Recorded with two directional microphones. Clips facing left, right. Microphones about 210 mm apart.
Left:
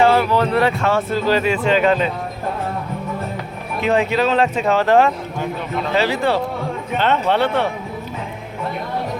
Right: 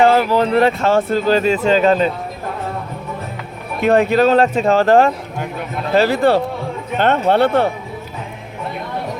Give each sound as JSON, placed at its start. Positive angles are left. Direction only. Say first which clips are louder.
{"t": 0.3, "sound": "speech", "louder": "right 3 dB", "side_deg": -35}
{"t": 0.9, "sound": "speech", "louder": "right 3 dB", "side_deg": -45}
{"t": 3.8, "sound": "speech", "louder": "right 4 dB", "side_deg": -55}